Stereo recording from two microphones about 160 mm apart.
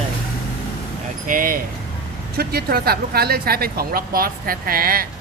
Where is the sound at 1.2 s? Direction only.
60° right (ahead or behind).